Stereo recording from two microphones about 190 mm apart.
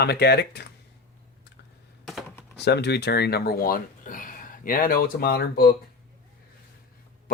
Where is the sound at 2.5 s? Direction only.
60° left (ahead or behind).